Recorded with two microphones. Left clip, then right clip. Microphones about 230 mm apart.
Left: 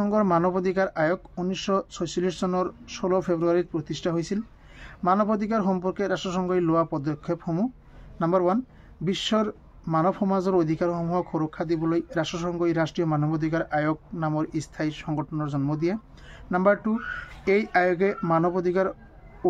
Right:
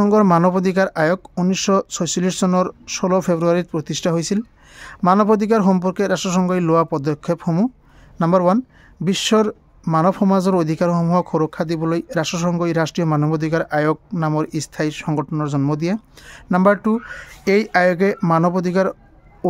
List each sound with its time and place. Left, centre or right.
0.0 s speech: right